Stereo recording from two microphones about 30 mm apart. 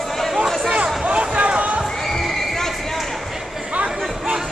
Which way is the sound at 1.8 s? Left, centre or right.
Centre.